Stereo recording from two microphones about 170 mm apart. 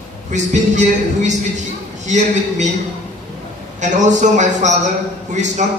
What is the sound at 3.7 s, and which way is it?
A man's voice, 45° right (ahead or behind).